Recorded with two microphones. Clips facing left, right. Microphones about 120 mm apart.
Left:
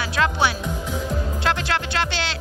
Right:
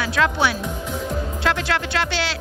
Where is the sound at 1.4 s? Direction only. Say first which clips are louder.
Right 2 dB; centre (ahead or behind).